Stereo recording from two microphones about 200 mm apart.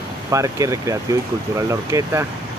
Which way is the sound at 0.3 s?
15° right (ahead or behind).